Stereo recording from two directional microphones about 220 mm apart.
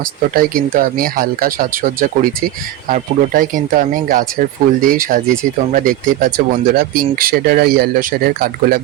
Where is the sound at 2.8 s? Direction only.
40° right (ahead or behind).